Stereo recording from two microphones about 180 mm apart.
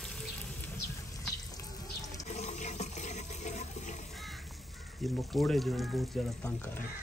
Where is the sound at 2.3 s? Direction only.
40° left (ahead or behind).